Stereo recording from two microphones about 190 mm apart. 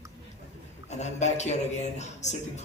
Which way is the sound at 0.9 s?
35° left (ahead or behind).